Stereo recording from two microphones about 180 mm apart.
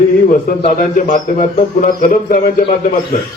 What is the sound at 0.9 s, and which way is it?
A man's voice, 45° left (ahead or behind).